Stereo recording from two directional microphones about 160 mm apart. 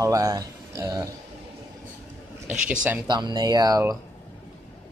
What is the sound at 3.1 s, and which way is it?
Speech, 25° right (ahead or behind).